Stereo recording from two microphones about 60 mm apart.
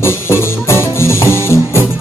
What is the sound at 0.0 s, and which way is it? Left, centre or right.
Music, left.